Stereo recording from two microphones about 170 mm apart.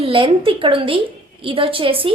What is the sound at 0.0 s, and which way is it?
A woman's voice, 30° right (ahead or behind).